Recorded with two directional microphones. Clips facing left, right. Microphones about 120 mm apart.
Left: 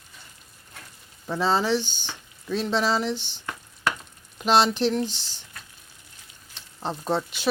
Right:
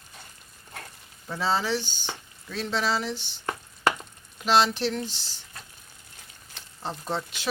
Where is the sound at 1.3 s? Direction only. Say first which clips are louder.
Left 4 dB; 20° left (ahead or behind).